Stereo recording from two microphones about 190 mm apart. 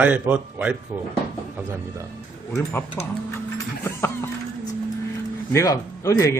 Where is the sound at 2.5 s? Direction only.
15° left (ahead or behind).